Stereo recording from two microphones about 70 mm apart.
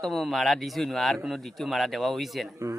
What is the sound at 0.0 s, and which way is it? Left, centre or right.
Speech, centre.